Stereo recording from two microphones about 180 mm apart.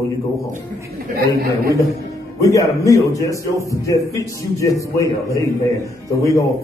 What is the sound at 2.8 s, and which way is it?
A man's voice, 20° left (ahead or behind).